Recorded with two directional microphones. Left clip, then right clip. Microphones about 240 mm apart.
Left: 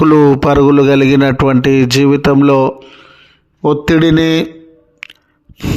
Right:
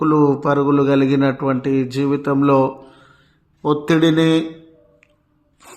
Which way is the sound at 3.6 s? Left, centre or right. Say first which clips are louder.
Left 5 dB; left.